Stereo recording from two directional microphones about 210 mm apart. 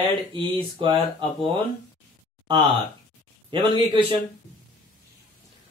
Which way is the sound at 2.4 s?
20° right (ahead or behind).